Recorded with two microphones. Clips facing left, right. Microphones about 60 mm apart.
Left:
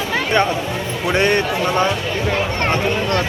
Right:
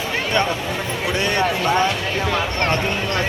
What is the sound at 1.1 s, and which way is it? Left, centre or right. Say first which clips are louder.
Speech: left 4 dB; left.